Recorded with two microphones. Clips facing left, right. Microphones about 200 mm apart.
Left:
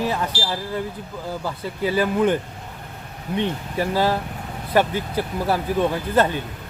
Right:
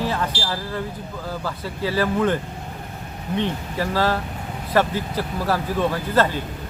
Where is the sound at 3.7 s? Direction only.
15° left (ahead or behind).